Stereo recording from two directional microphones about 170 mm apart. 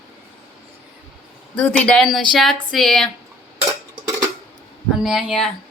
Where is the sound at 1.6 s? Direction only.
5° left (ahead or behind).